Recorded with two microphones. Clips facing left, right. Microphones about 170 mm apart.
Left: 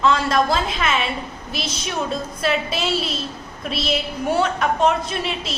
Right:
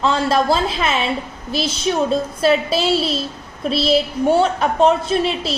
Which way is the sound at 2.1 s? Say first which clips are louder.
Right 5 dB; 30° right (ahead or behind).